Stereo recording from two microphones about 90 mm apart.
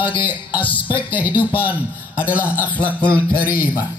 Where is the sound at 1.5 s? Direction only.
20° right (ahead or behind).